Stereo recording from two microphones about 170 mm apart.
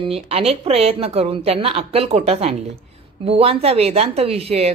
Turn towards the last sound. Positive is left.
turn(degrees=-35)  # may be behind; listen again after turning